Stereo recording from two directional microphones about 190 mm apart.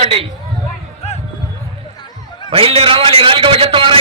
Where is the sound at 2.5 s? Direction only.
30° right (ahead or behind).